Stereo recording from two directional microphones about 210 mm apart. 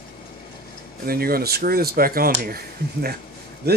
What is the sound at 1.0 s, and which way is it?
Speech, 45° right (ahead or behind).